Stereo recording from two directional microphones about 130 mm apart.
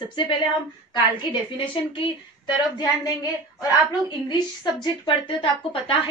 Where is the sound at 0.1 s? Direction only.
40° left (ahead or behind).